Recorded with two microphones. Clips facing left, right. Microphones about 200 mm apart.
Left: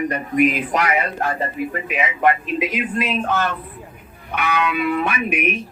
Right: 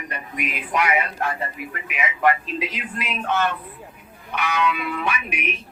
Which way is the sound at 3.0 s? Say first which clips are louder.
Right 2 dB; 35° left (ahead or behind).